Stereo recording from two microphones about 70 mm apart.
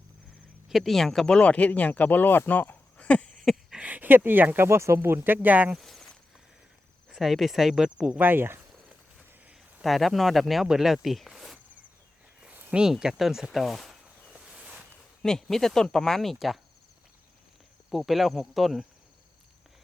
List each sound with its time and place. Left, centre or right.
0.7 s speech: centre
1.4 s speech: centre
2.5 s a sound: left
3.4 s a sound: centre
3.8 s speech: right
5.7 s speech: centre
7.1 s speech: centre
7.9 s cricket: centre
8.2 s speech: right
9.8 s speech: centre
12.7 s speech: centre
14.4 s a sound: centre
15.2 s speech: centre
17.9 s speech: centre